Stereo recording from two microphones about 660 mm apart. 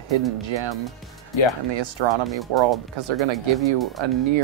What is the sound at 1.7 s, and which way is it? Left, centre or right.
Speech, right.